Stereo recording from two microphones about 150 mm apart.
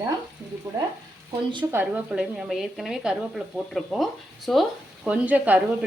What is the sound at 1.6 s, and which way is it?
Speech, 15° right (ahead or behind).